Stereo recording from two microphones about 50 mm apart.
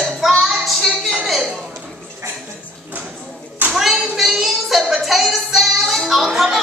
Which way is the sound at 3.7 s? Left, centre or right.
Centre.